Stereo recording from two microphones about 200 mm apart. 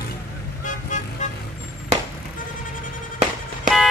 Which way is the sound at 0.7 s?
40° left (ahead or behind).